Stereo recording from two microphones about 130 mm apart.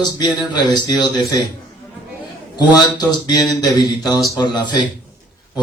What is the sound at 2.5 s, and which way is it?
A man's voice, 30° left (ahead or behind).